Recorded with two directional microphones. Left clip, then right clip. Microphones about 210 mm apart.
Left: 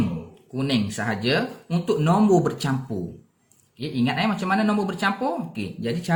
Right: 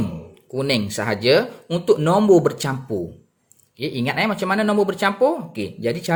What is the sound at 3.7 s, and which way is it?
Speech, 40° right (ahead or behind).